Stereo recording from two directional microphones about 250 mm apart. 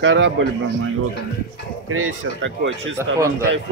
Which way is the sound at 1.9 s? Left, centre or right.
Right.